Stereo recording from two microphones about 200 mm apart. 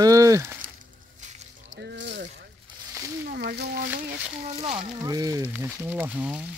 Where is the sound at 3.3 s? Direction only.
55° right (ahead or behind).